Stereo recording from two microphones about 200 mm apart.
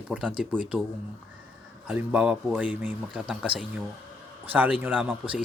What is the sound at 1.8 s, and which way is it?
A man's voice, 5° right (ahead or behind).